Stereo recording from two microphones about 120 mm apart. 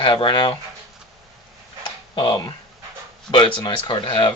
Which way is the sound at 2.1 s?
35° left (ahead or behind).